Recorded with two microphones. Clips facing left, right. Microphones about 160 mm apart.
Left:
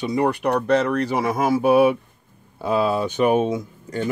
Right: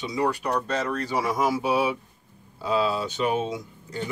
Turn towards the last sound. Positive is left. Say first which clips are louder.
# left 6 dB
turn(degrees=55)  # may be behind; listen again after turning